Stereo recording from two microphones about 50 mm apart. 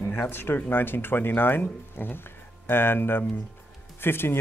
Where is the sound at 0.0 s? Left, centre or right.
Left.